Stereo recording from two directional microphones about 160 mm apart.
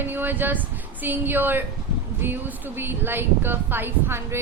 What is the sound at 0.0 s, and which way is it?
A woman's voice, 10° right (ahead or behind).